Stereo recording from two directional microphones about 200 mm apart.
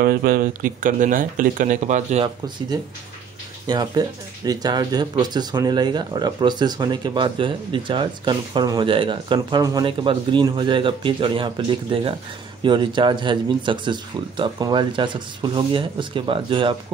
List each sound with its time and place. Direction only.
0.0 s speech: 50° right (ahead or behind)
3.6 s speech: 20° right (ahead or behind)